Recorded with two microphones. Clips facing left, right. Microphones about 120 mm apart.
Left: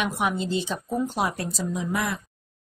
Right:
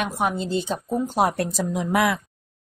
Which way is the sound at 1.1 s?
60° right (ahead or behind).